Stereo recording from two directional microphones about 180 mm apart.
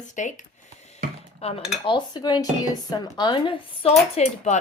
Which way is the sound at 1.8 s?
25° left (ahead or behind).